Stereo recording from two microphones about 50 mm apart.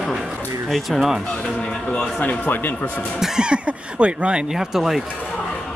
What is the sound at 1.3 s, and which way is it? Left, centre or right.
Speech, centre.